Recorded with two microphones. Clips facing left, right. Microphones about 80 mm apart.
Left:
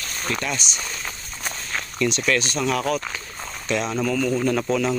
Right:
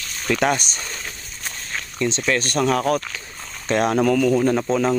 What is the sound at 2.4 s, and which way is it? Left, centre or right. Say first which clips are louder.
Speech: right 4 dB; right.